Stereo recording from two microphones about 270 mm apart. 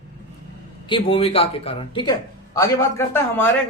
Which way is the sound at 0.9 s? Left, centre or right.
Centre.